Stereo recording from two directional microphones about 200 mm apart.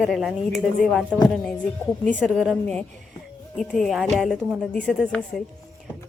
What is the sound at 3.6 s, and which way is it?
A woman's voice, centre (ahead or behind).